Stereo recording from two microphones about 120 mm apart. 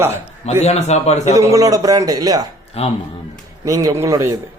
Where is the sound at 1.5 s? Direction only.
30° right (ahead or behind).